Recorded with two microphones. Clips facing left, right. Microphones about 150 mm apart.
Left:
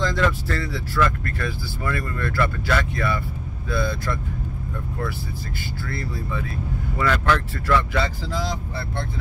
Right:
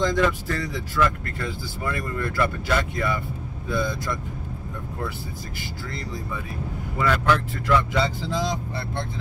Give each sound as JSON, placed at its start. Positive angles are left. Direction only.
{"t": 0.0, "sound": "speech", "side_deg": -15}
{"t": 7.0, "sound": "speech", "side_deg": -10}
{"t": 7.6, "sound": "speech", "side_deg": -20}